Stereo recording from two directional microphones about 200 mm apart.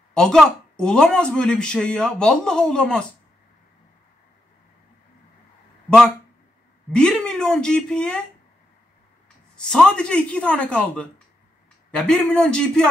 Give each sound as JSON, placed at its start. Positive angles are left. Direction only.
{"t": 0.1, "sound": "speech", "side_deg": 5}
{"t": 6.9, "sound": "speech", "side_deg": 5}
{"t": 9.7, "sound": "speech", "side_deg": 5}